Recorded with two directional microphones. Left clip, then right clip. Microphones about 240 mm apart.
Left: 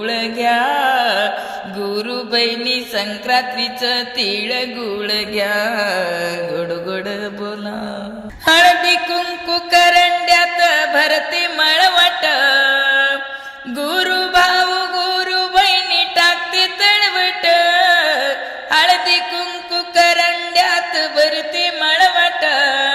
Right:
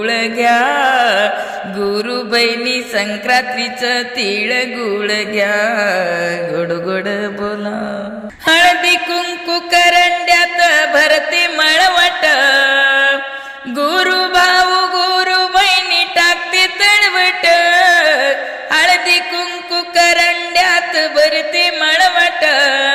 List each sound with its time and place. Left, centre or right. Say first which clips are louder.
0.0 s music: right 4 dB; right
1.8 s mantra: right 5 dB; right
5.0 s music: right 2 dB; right
8.4 s a sound: right 1 dB; right
13.7 s music: right 4 dB; right